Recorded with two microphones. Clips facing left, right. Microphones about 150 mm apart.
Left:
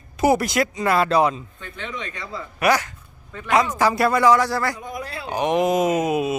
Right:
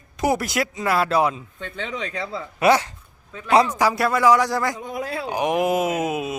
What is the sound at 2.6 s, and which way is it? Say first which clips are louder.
Speech: right 2 dB; 25° right (ahead or behind).